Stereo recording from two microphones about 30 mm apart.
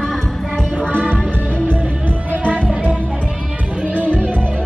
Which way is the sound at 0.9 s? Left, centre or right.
Right.